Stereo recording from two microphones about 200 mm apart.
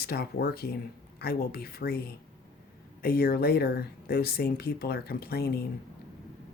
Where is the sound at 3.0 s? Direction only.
50° left (ahead or behind).